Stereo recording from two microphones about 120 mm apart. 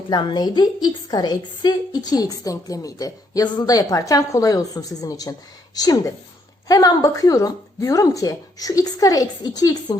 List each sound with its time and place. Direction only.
0.1 s a woman's voice: 40° left (ahead or behind)